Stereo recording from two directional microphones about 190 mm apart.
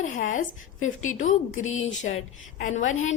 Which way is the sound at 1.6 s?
90° left.